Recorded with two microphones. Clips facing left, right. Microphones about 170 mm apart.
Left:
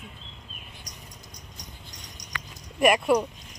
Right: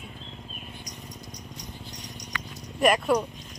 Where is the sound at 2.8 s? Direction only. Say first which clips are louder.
Left 1 dB; 10° left (ahead or behind).